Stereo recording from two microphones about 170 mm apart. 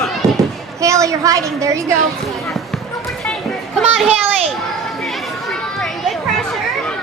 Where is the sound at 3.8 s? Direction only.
5° right (ahead or behind).